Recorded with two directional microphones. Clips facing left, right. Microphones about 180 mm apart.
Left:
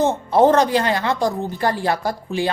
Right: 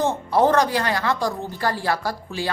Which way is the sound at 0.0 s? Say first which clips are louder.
Left 4 dB; 20° left (ahead or behind).